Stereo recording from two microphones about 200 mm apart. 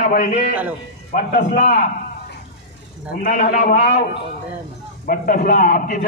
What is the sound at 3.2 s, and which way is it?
Speech, 40° left (ahead or behind).